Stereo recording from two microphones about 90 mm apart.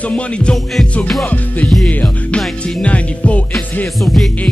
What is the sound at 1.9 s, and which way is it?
Speech, 15° left (ahead or behind).